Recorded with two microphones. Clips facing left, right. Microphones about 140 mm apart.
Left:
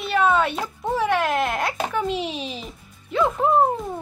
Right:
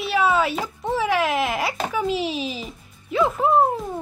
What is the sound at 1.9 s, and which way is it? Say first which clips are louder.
Music: right 1 dB; 5° right (ahead or behind).